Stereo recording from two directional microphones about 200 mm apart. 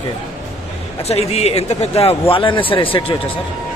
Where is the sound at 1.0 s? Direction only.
30° left (ahead or behind).